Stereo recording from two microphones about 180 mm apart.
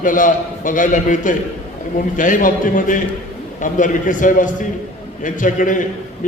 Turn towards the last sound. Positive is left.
turn(degrees=45)  # may be behind; listen again after turning